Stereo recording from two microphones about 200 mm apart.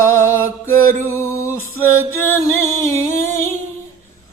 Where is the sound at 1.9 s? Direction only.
90° right.